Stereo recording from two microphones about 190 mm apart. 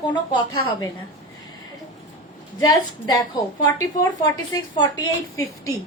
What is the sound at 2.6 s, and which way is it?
Speech, 20° left (ahead or behind).